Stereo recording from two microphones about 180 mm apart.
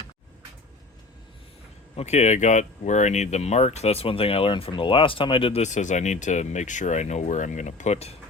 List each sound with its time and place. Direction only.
2.0 s speech: 40° left (ahead or behind)